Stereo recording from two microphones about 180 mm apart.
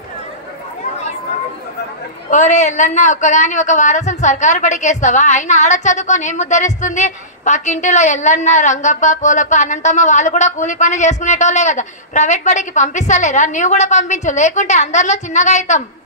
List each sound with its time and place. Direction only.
2.3 s a woman's voice: 40° left (ahead or behind)